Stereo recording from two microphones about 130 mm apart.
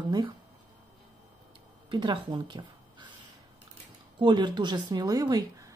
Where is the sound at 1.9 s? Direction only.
35° right (ahead or behind).